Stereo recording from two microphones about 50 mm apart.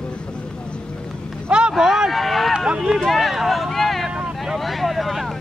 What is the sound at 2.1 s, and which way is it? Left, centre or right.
Speech, centre.